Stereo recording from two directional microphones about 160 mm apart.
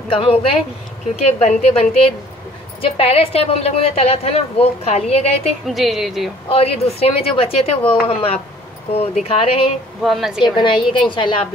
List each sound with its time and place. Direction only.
0.1 s a woman's voice: 35° left (ahead or behind)
5.7 s a woman's voice: centre (ahead or behind)
6.5 s a woman's voice: 40° left (ahead or behind)
10.0 s a woman's voice: centre (ahead or behind)
10.4 s a woman's voice: 30° left (ahead or behind)